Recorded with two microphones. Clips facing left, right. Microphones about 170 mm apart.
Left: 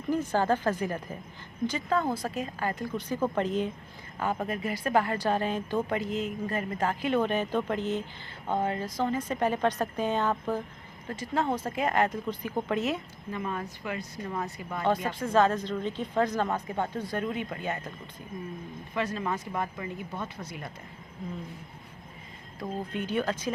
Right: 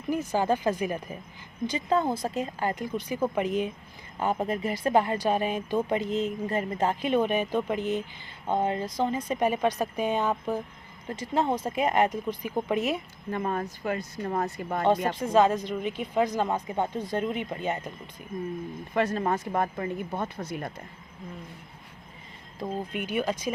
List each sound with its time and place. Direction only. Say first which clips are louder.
0.1 s a woman's voice: even; 10° right (ahead or behind)
13.3 s speech: right 4 dB; 45° right (ahead or behind)
15.1 s a woman's voice: right 2 dB; 15° right (ahead or behind)
18.9 s speech: right 5 dB; 50° right (ahead or behind)
22.5 s a woman's voice: right 2 dB; 15° right (ahead or behind)